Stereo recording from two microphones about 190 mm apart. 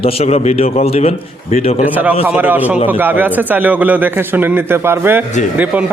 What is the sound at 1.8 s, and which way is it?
Speech, 10° right (ahead or behind).